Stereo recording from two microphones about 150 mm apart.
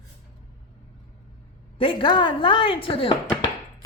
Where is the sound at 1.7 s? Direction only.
35° left (ahead or behind).